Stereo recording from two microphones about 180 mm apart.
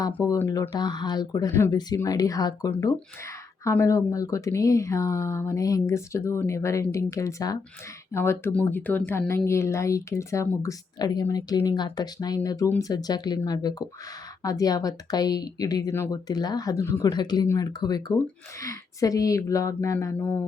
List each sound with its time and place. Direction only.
0.3 s speech: 15° left (ahead or behind)